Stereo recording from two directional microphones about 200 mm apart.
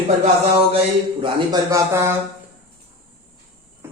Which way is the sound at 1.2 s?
20° right (ahead or behind).